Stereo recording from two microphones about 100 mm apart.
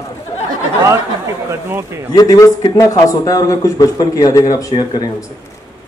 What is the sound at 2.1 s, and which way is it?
A man's voice, 40° left (ahead or behind).